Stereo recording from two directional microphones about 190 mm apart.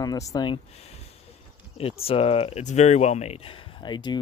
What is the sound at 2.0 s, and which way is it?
Speech, 30° left (ahead or behind).